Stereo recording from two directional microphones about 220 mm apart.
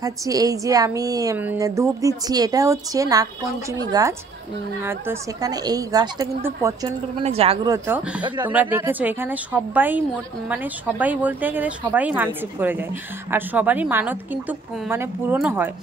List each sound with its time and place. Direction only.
0.0 s speech: 15° right (ahead or behind)
7.2 s speech: 25° right (ahead or behind); by 15.7 s 10° right (ahead or behind)